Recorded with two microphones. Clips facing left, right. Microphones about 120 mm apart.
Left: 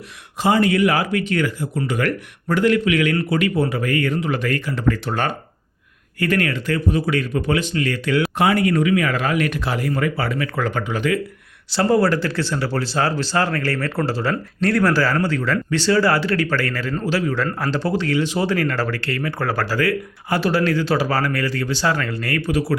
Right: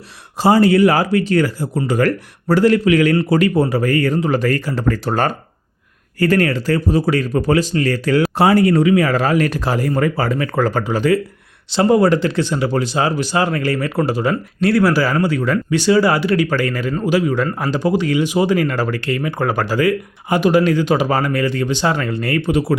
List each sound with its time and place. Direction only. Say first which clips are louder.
0.3 s speech: right 5 dB; 35° right (ahead or behind)
11.7 s speech: right 4 dB; 20° right (ahead or behind)